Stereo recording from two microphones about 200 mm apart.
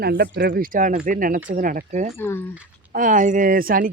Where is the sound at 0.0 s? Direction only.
55° right (ahead or behind); by 2.1 s 35° right (ahead or behind).